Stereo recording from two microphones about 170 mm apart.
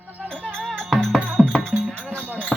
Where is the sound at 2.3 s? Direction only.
10° right (ahead or behind).